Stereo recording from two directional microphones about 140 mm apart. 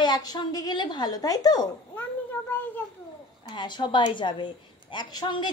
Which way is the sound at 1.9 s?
15° left (ahead or behind).